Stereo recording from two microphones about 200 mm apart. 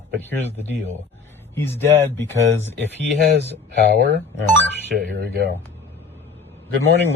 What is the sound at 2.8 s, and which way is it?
A man's voice, 55° right (ahead or behind).